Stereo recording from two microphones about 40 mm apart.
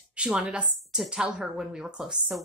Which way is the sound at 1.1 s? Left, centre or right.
Centre.